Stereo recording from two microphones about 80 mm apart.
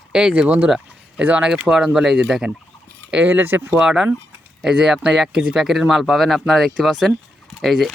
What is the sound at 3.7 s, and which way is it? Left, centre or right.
Speech, centre.